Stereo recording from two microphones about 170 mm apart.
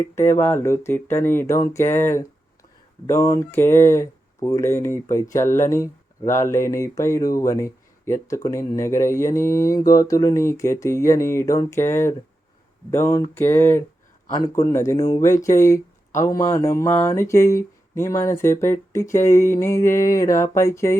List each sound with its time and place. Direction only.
0.0 s speech: 15° left (ahead or behind)